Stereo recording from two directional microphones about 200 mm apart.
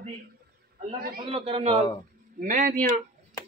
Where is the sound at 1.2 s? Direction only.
25° right (ahead or behind).